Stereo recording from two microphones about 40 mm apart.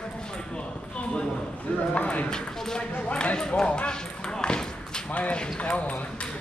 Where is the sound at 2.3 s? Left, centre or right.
Centre.